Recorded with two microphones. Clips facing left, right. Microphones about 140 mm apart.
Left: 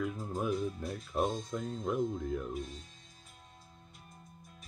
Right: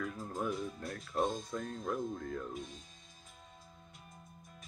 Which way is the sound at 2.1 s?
15° left (ahead or behind).